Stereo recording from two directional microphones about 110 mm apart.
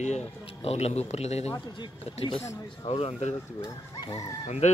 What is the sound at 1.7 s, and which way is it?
Speech, 55° left (ahead or behind).